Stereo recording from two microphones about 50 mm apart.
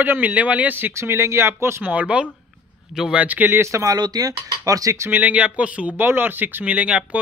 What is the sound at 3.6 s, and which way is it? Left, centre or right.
Speech, right.